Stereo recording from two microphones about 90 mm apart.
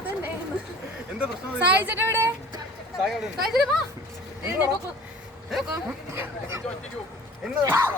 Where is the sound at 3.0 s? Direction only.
5° right (ahead or behind).